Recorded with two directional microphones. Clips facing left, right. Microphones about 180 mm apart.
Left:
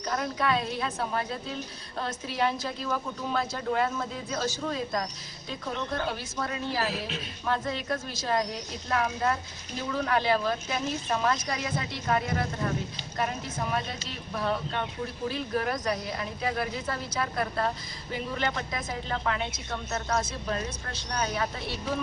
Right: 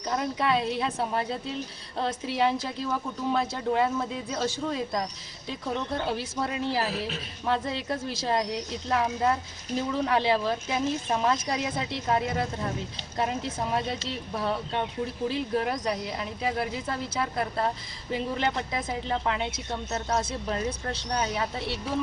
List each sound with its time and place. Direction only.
0.1 s speech: 20° right (ahead or behind)